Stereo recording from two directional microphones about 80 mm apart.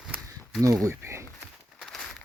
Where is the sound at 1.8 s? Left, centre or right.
Centre.